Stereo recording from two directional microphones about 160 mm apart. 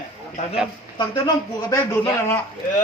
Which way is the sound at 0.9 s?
25° left (ahead or behind).